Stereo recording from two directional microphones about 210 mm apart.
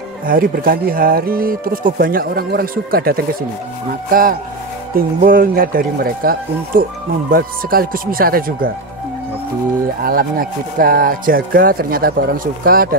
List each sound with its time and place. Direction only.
0.3 s a man's voice: 45° right (ahead or behind)
10.0 s a man's voice: 45° right (ahead or behind)